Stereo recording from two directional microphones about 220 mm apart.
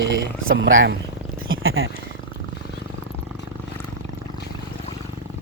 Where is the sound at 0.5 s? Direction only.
60° right (ahead or behind).